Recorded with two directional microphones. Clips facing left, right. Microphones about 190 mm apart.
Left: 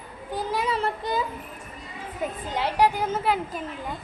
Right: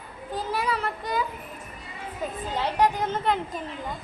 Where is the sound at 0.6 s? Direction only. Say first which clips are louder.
Left 2 dB; 25° left (ahead or behind).